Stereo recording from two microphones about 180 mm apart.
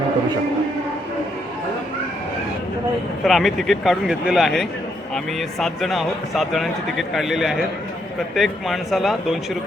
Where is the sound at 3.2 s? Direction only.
Centre (ahead or behind).